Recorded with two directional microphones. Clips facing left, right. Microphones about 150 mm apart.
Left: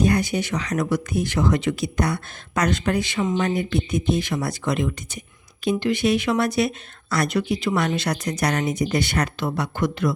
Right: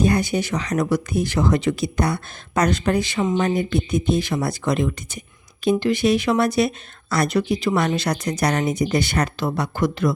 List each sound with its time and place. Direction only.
0.0 s speech: 30° right (ahead or behind)